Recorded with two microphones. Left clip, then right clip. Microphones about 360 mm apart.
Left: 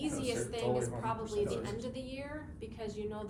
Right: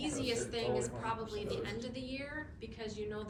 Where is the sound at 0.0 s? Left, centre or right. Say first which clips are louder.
Left 1 dB; centre.